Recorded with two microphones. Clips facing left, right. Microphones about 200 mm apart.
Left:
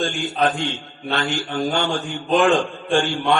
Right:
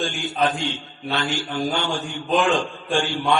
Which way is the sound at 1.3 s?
55° left (ahead or behind).